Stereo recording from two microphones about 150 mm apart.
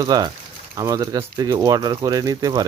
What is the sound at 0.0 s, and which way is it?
Speech, 30° right (ahead or behind).